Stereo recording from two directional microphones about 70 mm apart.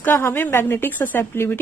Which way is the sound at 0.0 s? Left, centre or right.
Left.